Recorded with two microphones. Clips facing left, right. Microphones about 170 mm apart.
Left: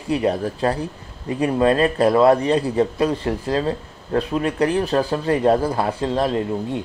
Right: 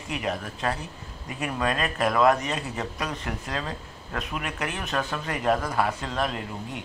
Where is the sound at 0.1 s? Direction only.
35° left (ahead or behind).